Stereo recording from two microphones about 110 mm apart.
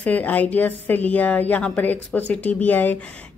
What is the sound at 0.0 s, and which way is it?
A woman's voice, 15° left (ahead or behind).